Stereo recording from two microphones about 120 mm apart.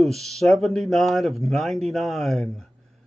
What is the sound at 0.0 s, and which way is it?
Speech, centre (ahead or behind).